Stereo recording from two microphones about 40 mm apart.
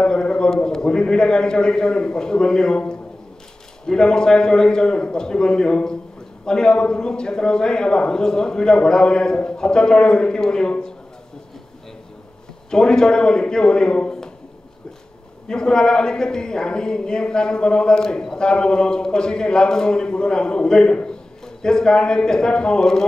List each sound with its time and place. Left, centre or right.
0.0 s a sound: left
0.7 s a woman's voice: centre
12.7 s a woman's voice: centre
15.4 s a woman's voice: centre